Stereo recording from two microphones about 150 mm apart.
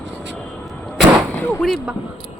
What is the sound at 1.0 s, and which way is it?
Slam, 5° left (ahead or behind).